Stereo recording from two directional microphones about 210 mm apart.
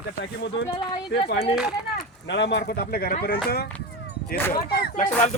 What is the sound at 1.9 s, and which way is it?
Speech, 55° left (ahead or behind).